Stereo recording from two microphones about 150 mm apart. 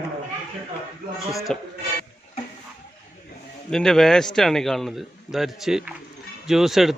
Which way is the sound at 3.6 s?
5° left (ahead or behind).